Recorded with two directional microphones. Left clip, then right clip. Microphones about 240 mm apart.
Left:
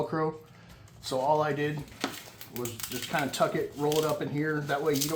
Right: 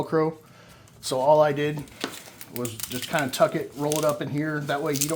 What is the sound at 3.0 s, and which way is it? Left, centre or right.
Speech, right.